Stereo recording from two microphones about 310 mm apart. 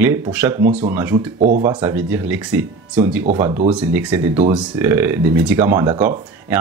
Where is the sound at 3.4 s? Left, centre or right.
Centre.